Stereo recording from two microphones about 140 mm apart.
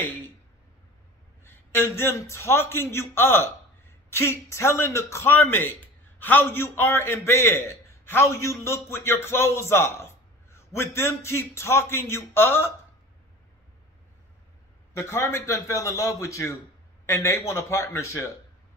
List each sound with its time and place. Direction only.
0.0 s speech: 15° left (ahead or behind)
1.4 s a man's voice: 15° left (ahead or behind)
15.0 s a man's voice: 20° left (ahead or behind)